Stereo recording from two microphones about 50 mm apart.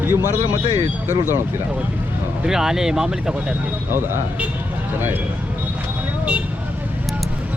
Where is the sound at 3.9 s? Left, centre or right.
Right.